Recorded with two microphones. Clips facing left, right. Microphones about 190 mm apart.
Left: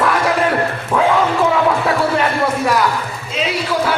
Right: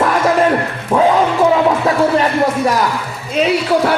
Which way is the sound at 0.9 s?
20° right (ahead or behind).